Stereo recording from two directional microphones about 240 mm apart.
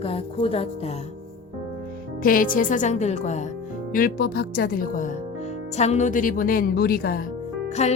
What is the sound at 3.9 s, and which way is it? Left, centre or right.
A woman's voice, left.